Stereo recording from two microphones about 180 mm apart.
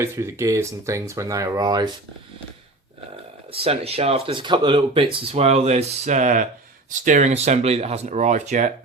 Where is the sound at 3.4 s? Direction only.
30° right (ahead or behind).